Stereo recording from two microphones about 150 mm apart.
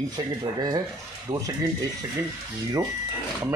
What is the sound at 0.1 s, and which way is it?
Speech, 25° right (ahead or behind).